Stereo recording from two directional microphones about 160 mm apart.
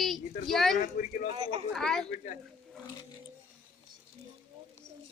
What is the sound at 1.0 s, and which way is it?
Speech, 50° left (ahead or behind).